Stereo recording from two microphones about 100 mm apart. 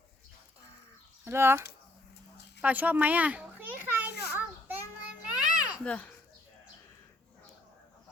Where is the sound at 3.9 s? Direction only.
20° right (ahead or behind).